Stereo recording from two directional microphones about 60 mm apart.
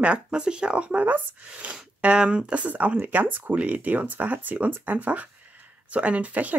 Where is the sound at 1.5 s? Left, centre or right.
Right.